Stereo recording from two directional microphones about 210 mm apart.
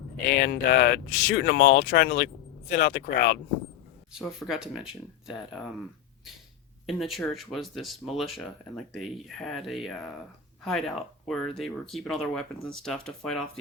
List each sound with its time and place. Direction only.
0.3 s speech: 50° left (ahead or behind)
4.1 s speech: centre (ahead or behind)
6.8 s speech: centre (ahead or behind)